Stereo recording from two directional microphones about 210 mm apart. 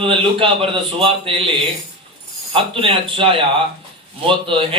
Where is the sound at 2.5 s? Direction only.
25° right (ahead or behind).